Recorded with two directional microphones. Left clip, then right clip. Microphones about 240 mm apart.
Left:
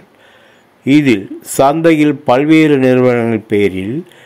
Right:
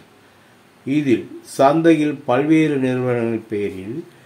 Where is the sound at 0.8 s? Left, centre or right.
Left.